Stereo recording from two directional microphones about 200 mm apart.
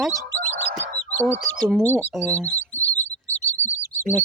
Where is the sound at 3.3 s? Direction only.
10° left (ahead or behind).